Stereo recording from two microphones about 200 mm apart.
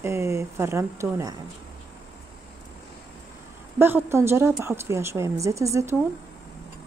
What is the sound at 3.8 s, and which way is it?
Speech, 10° right (ahead or behind).